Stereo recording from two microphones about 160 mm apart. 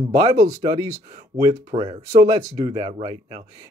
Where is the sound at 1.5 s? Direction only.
35° right (ahead or behind).